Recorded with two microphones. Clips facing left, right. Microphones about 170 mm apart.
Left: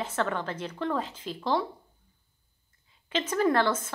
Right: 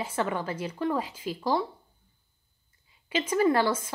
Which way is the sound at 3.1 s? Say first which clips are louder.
Right 1 dB; 10° right (ahead or behind).